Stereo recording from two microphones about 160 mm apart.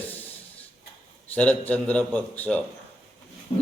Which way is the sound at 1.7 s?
10° left (ahead or behind).